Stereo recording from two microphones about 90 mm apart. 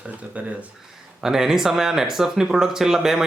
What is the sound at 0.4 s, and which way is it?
Speech, 15° right (ahead or behind).